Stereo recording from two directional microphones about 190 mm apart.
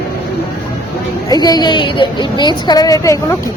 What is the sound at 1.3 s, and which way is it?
Speech, 20° left (ahead or behind).